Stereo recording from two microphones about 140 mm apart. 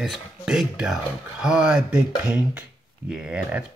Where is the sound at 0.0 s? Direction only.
Centre (ahead or behind).